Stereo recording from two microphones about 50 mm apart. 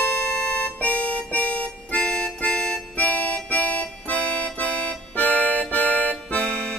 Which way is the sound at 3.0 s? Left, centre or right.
Left.